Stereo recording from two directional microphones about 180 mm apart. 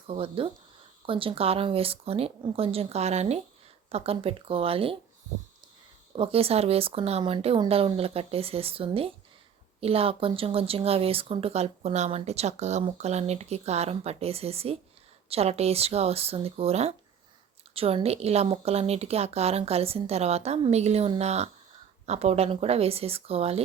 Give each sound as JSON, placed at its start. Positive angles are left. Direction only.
{"t": 0.1, "sound": "speech", "side_deg": -30}
{"t": 6.1, "sound": "speech", "side_deg": -30}